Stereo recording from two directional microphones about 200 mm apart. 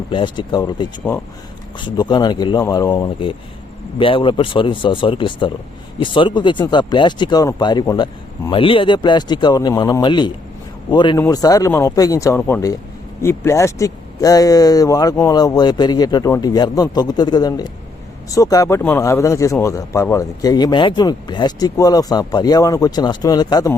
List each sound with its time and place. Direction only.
0.1 s speech: 25° left (ahead or behind)